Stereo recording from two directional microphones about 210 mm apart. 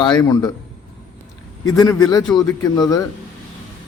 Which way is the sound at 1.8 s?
20° left (ahead or behind).